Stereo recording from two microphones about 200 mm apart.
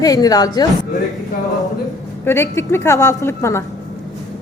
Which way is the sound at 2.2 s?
10° left (ahead or behind).